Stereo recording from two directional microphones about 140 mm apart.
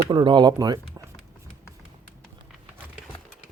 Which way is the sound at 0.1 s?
30° right (ahead or behind).